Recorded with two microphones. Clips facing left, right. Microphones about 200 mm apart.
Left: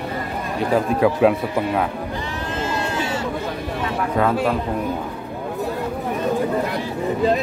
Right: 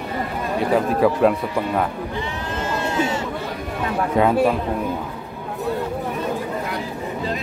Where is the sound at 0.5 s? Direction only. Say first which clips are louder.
Even; centre (ahead or behind).